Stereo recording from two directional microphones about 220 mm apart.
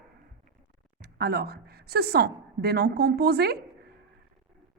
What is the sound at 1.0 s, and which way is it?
A woman's voice, 45° right (ahead or behind).